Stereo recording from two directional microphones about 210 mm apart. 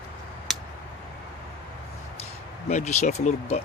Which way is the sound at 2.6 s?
35° left (ahead or behind).